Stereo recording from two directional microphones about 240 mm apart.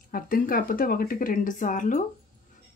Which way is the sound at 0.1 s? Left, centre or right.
Left.